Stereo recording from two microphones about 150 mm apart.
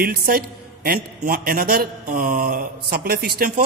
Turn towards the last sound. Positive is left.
turn(degrees=-85)